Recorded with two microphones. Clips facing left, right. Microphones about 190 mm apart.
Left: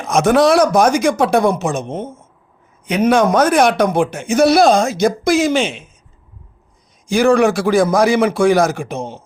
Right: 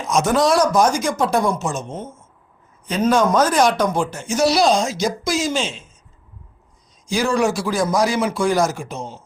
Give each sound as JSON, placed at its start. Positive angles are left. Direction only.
{"t": 0.0, "sound": "speech", "side_deg": 60}
{"t": 3.3, "sound": "speech", "side_deg": 60}
{"t": 7.1, "sound": "speech", "side_deg": 60}